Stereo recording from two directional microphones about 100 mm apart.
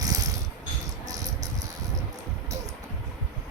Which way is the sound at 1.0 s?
35° right (ahead or behind).